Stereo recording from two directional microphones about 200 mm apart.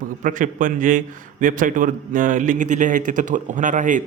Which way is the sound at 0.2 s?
40° right (ahead or behind).